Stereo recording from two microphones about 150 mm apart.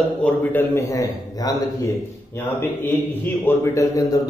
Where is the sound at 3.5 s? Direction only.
20° left (ahead or behind).